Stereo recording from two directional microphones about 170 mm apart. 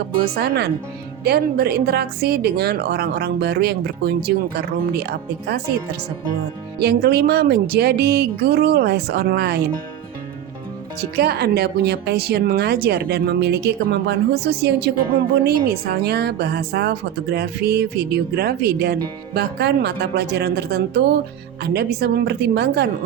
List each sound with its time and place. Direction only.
0.3 s a woman's voice: 70° right (ahead or behind)
6.7 s a woman's voice: 70° right (ahead or behind)
11.2 s a woman's voice: 70° right (ahead or behind)